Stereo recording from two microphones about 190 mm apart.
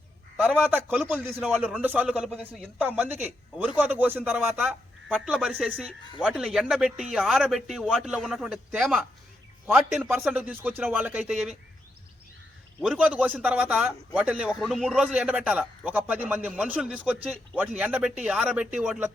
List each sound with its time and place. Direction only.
0.4 s a man's voice: 10° right (ahead or behind)
1.3 s a man's voice: centre (ahead or behind)
12.8 s a man's voice: 5° right (ahead or behind)